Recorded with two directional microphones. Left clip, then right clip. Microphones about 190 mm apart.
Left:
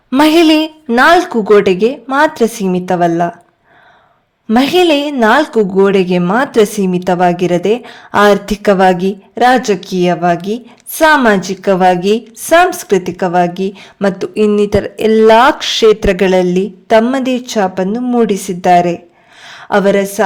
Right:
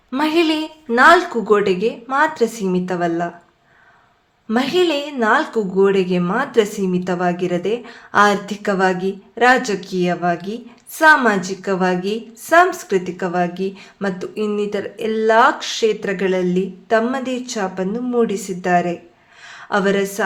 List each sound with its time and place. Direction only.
0.1 s a woman's voice: 50° left (ahead or behind)
4.4 s a woman's voice: 45° left (ahead or behind)
19.5 s a sound: 45° left (ahead or behind)